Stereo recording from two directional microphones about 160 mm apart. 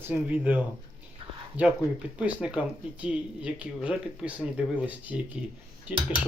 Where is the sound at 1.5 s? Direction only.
10° right (ahead or behind).